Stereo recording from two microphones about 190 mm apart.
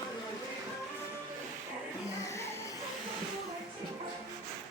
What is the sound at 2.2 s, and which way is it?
Music, 15° left (ahead or behind).